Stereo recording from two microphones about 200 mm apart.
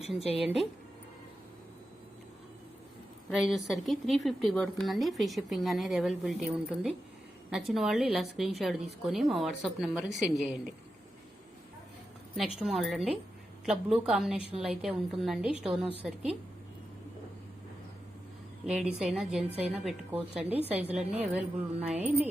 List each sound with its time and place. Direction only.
0.3 s a woman's voice: centre (ahead or behind)
3.2 s a woman's voice: centre (ahead or behind)
12.5 s a woman's voice: centre (ahead or behind)
18.6 s a woman's voice: 5° right (ahead or behind)
21.0 s a woman's voice: 30° right (ahead or behind)
21.3 s speech: 5° right (ahead or behind)